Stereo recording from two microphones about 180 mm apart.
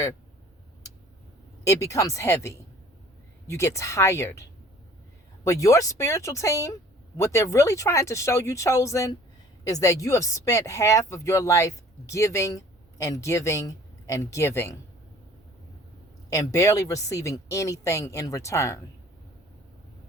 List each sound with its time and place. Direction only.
1.6 s speech: 15° left (ahead or behind)
5.5 s speech: 20° left (ahead or behind)
16.3 s speech: 20° left (ahead or behind)